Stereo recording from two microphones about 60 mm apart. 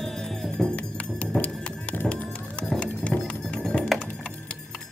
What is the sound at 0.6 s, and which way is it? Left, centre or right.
Music, centre.